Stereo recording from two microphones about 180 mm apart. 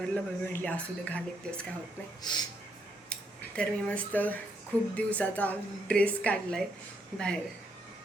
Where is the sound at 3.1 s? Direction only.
5° left (ahead or behind).